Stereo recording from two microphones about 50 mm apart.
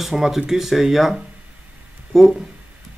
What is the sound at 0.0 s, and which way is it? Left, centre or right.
Speech, centre.